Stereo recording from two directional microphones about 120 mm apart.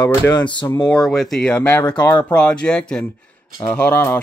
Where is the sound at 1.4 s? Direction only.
15° left (ahead or behind).